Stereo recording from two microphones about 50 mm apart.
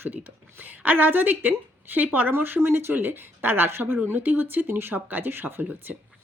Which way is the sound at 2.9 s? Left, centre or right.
Right.